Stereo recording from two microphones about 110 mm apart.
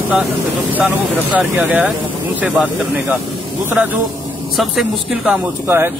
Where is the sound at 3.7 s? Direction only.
15° right (ahead or behind).